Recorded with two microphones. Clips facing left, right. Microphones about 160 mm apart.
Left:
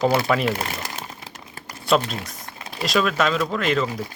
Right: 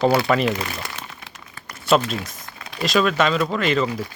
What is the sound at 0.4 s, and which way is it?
Speech, 40° left (ahead or behind).